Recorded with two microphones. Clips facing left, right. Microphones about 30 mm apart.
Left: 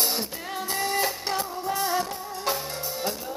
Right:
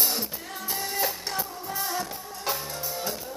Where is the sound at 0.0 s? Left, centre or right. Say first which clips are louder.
Left 2 dB; centre.